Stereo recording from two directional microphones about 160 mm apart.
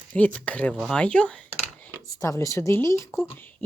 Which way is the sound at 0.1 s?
10° left (ahead or behind).